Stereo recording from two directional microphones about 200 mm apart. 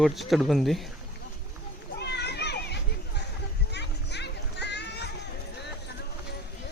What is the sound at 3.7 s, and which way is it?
Music, 55° left (ahead or behind).